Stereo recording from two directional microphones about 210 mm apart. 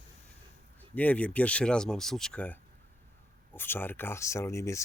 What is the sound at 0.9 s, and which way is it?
Speech, 5° left (ahead or behind).